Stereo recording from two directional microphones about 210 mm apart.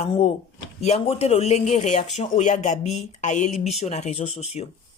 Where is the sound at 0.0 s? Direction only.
30° left (ahead or behind).